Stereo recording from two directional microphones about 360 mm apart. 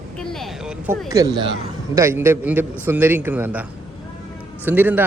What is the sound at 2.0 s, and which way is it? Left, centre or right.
A man's voice, centre.